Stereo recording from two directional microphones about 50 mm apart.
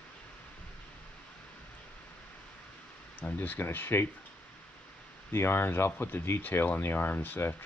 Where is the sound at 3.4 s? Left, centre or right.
Left.